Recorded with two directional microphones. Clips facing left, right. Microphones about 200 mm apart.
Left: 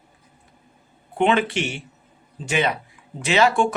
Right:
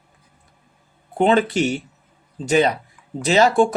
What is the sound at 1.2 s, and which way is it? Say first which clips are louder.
Speech: right 3 dB; 40° right (ahead or behind).